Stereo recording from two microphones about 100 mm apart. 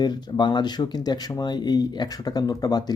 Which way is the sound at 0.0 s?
45° left (ahead or behind).